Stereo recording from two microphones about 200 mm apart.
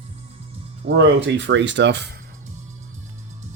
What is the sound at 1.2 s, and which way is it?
Speech, 60° right (ahead or behind).